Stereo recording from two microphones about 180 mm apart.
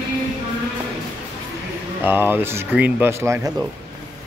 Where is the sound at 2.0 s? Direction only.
10° right (ahead or behind).